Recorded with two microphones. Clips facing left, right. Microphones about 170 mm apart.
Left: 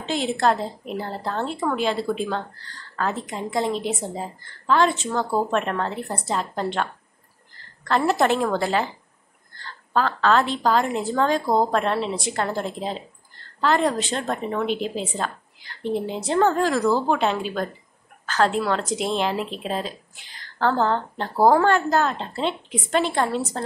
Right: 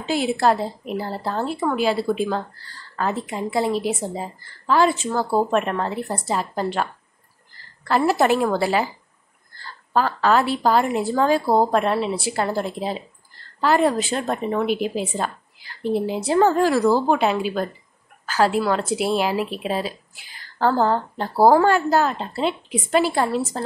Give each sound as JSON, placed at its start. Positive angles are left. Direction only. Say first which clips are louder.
{"t": 0.0, "sound": "a woman's voice", "louder": "right 2 dB", "side_deg": -5}